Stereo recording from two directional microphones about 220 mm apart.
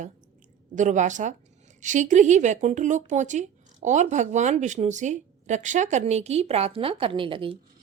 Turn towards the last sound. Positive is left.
turn(degrees=-25)  # may be behind; listen again after turning